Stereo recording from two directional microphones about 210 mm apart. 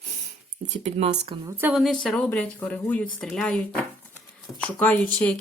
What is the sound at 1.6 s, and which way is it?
Speech, centre (ahead or behind).